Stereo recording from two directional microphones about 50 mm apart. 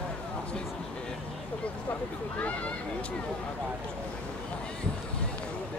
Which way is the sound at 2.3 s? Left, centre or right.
Left.